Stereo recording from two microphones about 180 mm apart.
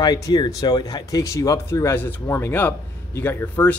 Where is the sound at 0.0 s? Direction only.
20° left (ahead or behind).